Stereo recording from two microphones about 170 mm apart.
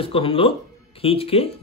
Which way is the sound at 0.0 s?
30° left (ahead or behind).